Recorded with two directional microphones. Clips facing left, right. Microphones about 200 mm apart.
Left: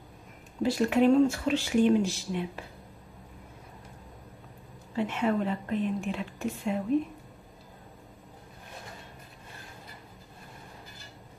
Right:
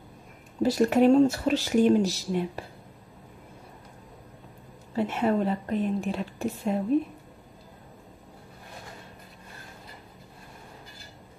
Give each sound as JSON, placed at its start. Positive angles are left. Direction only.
{"t": 0.6, "sound": "speech", "side_deg": -40}
{"t": 4.9, "sound": "speech", "side_deg": -40}